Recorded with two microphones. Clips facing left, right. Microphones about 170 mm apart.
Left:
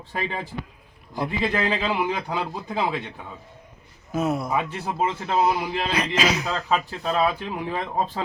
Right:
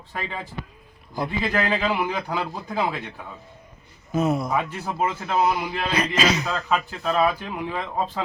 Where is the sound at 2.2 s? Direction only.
20° left (ahead or behind).